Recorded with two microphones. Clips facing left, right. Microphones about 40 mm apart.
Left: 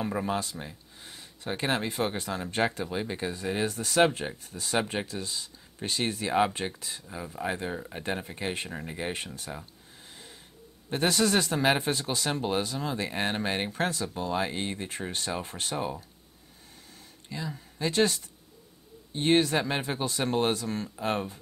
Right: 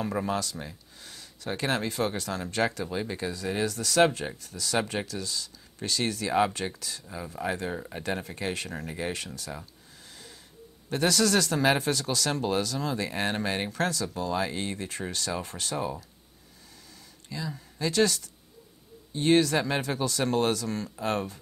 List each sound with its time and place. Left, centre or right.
0.0 s speech: centre
1.0 s speech: left
7.1 s speech: centre; by 9.5 s left
10.9 s speech: left
17.3 s speech: left